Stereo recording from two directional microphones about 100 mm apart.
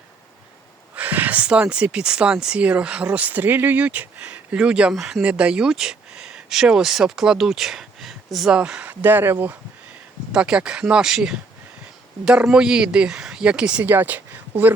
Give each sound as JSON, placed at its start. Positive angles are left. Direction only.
{"t": 0.9, "sound": "speech", "side_deg": -15}
{"t": 10.3, "sound": "speech", "side_deg": -10}